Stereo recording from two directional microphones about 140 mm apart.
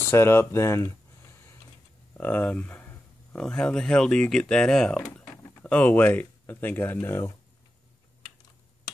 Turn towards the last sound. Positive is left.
turn(degrees=20)  # may be behind; listen again after turning